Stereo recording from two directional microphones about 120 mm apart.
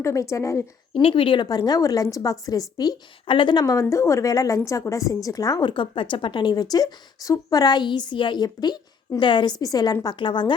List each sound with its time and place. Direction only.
0.0 s a woman's voice: 25° left (ahead or behind)
1.0 s a woman's voice: 45° left (ahead or behind)